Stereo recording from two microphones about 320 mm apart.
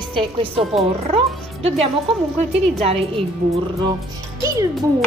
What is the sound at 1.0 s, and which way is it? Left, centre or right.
Speech, centre.